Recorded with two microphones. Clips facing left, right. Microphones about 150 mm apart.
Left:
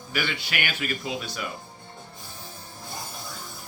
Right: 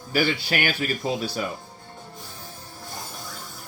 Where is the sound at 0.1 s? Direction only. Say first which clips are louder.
Right 7 dB; 35° right (ahead or behind).